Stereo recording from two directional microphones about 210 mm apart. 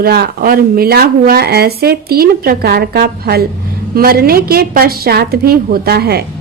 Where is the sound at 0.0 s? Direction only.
45° right (ahead or behind).